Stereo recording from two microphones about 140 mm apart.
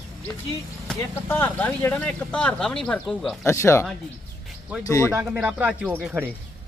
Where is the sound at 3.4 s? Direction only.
20° left (ahead or behind).